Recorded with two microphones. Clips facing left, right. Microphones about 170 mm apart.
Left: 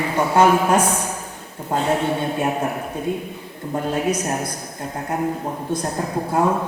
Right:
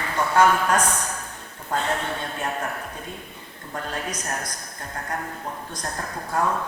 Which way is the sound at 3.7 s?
10° left (ahead or behind).